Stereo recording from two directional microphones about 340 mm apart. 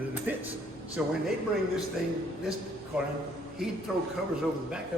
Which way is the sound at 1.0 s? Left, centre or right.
Centre.